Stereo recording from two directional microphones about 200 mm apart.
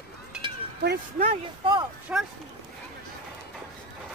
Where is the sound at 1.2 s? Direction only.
25° right (ahead or behind).